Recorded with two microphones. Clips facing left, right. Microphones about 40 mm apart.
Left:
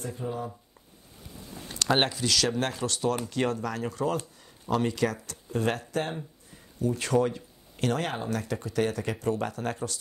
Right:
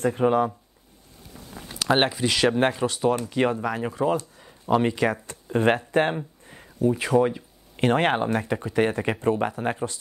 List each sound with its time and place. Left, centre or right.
0.0 s speech: right
1.7 s speech: centre; by 5.8 s right
5.9 s a sound: right
6.9 s speech: centre
7.7 s speech: right